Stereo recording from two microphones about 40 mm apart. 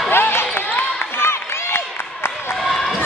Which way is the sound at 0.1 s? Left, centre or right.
Left.